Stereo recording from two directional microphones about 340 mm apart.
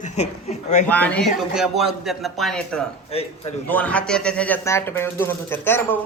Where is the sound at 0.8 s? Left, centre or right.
Centre.